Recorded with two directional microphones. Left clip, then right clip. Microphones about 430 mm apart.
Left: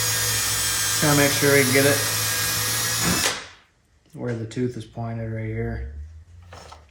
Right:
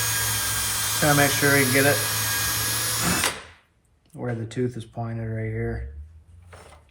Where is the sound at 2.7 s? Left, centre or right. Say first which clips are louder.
Left 2 dB; centre.